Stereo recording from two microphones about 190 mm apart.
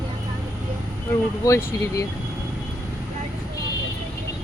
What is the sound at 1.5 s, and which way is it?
Speech, 15° left (ahead or behind).